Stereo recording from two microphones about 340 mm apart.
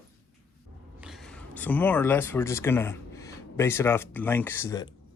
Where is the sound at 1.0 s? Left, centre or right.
Centre.